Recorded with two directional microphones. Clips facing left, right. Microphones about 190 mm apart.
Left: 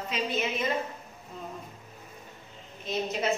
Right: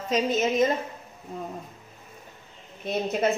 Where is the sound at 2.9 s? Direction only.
55° right (ahead or behind).